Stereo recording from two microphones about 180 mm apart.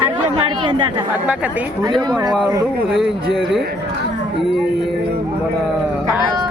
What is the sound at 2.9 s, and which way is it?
Speech, centre (ahead or behind).